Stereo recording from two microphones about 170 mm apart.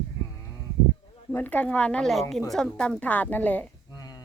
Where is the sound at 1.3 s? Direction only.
10° left (ahead or behind).